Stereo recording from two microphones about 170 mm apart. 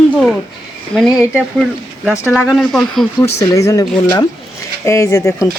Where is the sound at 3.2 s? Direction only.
20° left (ahead or behind).